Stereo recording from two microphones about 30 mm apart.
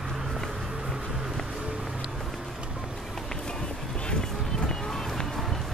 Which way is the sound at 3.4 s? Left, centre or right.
Left.